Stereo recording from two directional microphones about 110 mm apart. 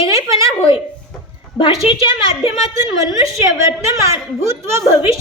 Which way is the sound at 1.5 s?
50° left (ahead or behind).